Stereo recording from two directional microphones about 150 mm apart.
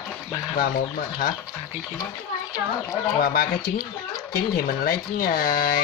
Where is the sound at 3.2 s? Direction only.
90° left.